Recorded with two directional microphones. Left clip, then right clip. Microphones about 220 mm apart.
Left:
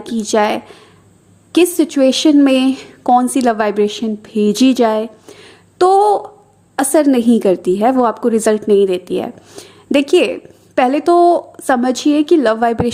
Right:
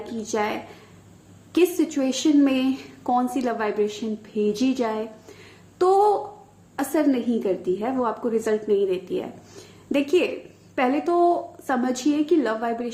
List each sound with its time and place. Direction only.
0.0 s speech: 45° left (ahead or behind)